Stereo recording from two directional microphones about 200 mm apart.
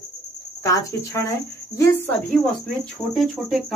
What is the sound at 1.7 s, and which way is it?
Speech, 15° left (ahead or behind).